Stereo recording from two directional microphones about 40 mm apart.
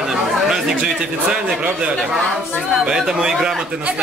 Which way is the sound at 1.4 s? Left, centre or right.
Right.